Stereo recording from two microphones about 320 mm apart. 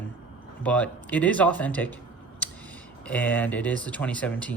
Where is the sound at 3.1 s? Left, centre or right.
Centre.